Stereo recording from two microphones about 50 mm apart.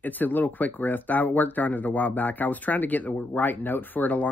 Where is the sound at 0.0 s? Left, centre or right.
Left.